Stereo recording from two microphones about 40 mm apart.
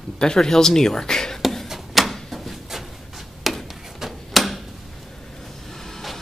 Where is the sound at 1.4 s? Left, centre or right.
Centre.